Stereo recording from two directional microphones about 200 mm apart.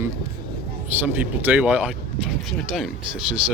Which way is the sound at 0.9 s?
10° right (ahead or behind).